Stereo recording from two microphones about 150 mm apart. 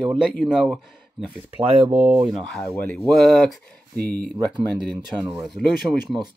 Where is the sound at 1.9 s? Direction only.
10° right (ahead or behind).